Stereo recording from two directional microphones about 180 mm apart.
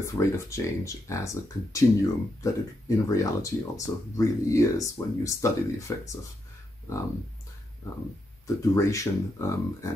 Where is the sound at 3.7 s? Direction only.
15° left (ahead or behind).